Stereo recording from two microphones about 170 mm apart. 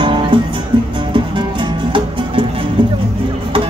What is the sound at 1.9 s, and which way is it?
Music, 30° right (ahead or behind).